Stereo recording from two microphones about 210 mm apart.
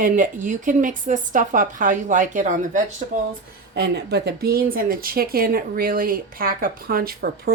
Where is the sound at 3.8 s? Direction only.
50° right (ahead or behind).